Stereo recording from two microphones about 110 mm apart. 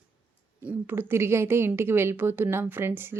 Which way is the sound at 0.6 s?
20° right (ahead or behind).